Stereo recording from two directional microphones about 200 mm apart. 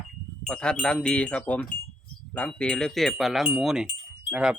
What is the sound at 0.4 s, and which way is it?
Speech, 5° left (ahead or behind).